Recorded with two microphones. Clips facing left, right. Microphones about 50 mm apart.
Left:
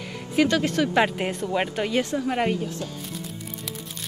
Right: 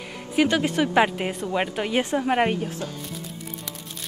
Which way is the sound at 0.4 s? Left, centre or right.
Centre.